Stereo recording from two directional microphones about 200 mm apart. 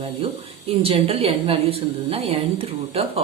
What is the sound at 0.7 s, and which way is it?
Speech, 30° right (ahead or behind).